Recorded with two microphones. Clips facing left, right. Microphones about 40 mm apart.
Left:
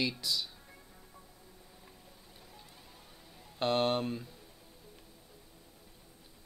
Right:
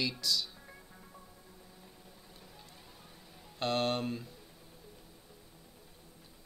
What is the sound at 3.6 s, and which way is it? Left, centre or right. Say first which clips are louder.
Speech: left 2 dB; centre.